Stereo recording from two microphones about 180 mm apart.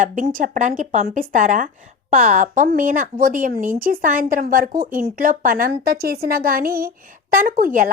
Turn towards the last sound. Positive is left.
turn(degrees=-50)  # may be behind; listen again after turning